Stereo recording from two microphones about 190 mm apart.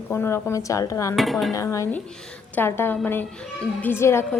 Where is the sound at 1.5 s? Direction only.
15° left (ahead or behind).